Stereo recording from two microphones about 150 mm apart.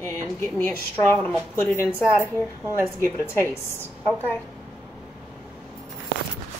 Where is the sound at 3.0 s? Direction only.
15° left (ahead or behind).